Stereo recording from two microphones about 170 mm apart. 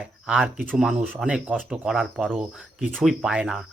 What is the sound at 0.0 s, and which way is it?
Speech, 5° right (ahead or behind).